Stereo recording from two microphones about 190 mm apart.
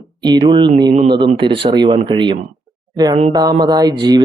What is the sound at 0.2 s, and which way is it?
Speech, 20° right (ahead or behind).